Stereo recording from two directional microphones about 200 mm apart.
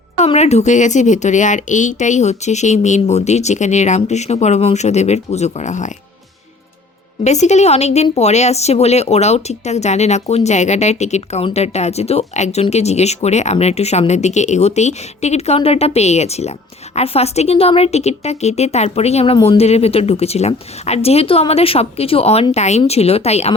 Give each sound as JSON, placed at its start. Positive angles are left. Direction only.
{"t": 0.2, "sound": "speech", "side_deg": 35}
{"t": 7.3, "sound": "speech", "side_deg": 35}